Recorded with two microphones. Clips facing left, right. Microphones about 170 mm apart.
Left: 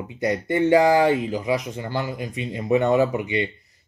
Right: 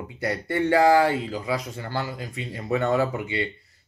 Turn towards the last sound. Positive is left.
turn(degrees=20)  # may be behind; listen again after turning